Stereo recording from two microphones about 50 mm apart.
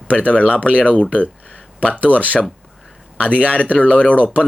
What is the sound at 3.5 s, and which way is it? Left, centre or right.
Speech, left.